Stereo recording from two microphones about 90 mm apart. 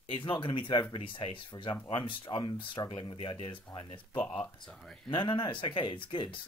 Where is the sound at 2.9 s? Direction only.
80° left.